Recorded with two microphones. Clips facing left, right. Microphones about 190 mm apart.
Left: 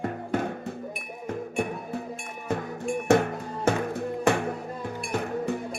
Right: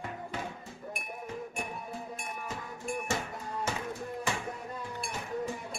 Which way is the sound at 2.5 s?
60° left (ahead or behind).